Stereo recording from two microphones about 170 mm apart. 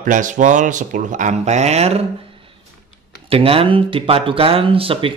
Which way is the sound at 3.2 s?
35° right (ahead or behind).